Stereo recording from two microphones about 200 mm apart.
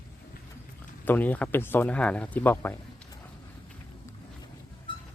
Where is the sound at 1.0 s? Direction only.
10° left (ahead or behind).